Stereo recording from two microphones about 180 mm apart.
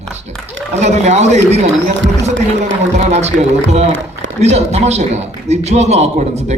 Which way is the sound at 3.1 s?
40° right (ahead or behind).